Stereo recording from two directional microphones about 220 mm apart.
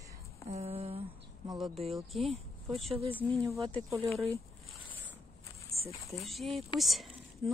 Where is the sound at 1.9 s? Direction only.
Centre (ahead or behind).